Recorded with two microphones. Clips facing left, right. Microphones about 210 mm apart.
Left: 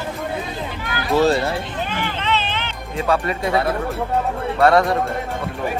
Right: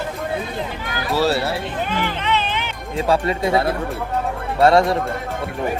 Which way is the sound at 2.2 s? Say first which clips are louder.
Right 1 dB; 15° right (ahead or behind).